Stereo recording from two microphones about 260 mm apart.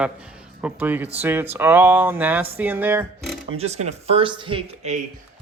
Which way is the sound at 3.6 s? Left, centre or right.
Right.